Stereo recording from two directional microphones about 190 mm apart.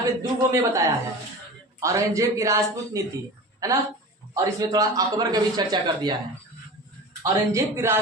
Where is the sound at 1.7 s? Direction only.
15° right (ahead or behind).